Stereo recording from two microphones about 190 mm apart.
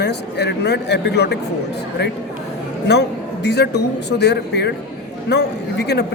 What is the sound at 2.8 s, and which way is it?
Speech, 65° left (ahead or behind).